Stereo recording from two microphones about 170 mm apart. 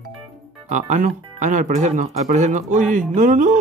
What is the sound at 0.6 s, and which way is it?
Speech, 45° right (ahead or behind).